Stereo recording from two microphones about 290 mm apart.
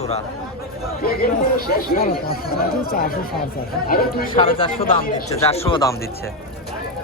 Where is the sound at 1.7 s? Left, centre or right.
Left.